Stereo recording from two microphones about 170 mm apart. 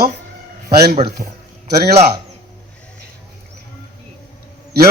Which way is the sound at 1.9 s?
35° right (ahead or behind).